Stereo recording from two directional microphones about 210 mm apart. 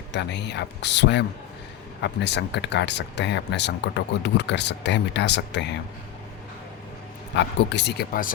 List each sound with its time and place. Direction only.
0.1 s speech: 55° left (ahead or behind)
7.3 s speech: 55° left (ahead or behind)